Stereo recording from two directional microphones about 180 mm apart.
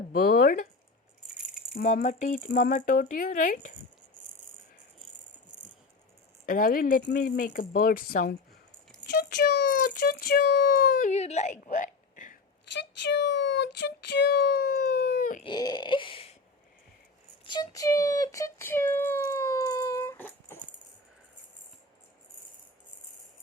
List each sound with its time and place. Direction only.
0.1 s speech: 55° left (ahead or behind)
2.0 s speech: 45° left (ahead or behind)
6.4 s a woman's voice: 50° left (ahead or behind)
9.0 s speech: 65° left (ahead or behind)
11.1 s a woman's voice: 40° left (ahead or behind)
12.7 s speech: 75° left (ahead or behind); by 15.4 s 50° left (ahead or behind)
15.4 s a sound: 25° left (ahead or behind)
17.4 s a sound: 25° left (ahead or behind)